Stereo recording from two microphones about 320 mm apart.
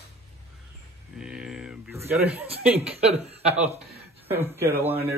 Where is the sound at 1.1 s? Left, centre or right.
Centre.